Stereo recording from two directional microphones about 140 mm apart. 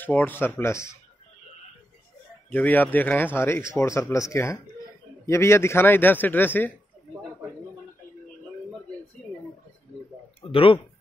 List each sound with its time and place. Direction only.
0.0 s a man's voice: 15° left (ahead or behind)
2.5 s a man's voice: 10° left (ahead or behind)
10.4 s speech: 40° left (ahead or behind)